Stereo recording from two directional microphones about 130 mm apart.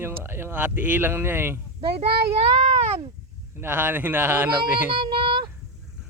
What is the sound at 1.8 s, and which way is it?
A child's voice, 45° right (ahead or behind).